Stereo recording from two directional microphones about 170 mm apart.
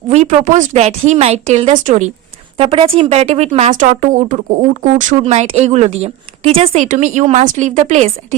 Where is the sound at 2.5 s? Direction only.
35° right (ahead or behind).